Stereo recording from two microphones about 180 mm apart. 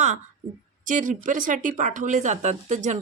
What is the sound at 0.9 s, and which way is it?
Speech, 45° right (ahead or behind).